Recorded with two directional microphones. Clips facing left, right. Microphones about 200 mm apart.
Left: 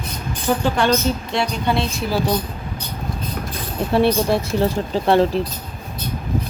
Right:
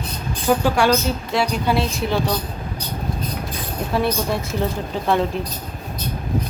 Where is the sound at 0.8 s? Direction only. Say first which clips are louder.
Even; 10° right (ahead or behind).